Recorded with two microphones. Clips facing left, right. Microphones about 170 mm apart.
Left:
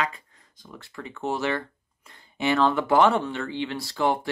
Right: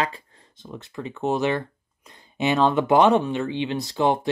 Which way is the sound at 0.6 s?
20° right (ahead or behind).